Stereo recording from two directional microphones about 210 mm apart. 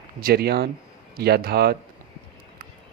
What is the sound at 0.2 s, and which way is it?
Speech, 45° right (ahead or behind).